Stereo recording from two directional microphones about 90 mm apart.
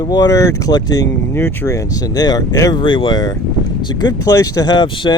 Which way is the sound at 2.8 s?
60° left (ahead or behind).